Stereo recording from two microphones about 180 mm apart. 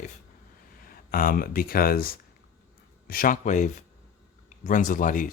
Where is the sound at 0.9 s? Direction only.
50° left (ahead or behind).